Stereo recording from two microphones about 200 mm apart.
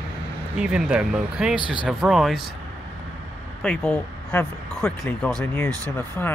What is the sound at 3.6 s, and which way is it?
Speech, 5° left (ahead or behind).